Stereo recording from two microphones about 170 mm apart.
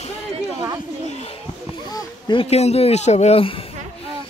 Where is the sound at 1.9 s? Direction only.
25° left (ahead or behind).